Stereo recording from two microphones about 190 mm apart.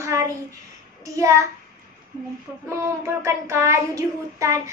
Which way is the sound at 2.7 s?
15° right (ahead or behind).